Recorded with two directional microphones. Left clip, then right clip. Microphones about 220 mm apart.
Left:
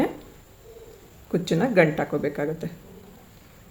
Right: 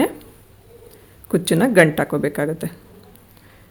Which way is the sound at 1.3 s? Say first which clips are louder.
Right 6 dB; 50° right (ahead or behind).